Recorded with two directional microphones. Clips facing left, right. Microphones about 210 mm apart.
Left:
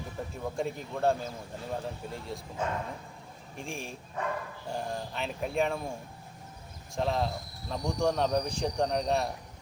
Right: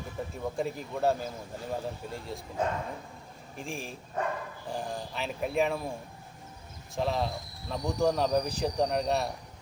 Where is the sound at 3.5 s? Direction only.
Centre (ahead or behind).